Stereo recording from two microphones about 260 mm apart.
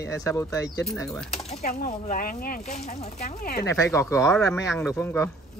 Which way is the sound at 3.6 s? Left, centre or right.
Centre.